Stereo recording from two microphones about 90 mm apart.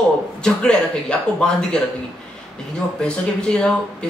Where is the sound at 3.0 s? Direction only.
10° left (ahead or behind).